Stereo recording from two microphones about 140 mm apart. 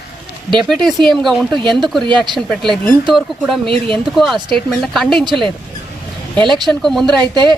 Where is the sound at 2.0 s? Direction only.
30° right (ahead or behind).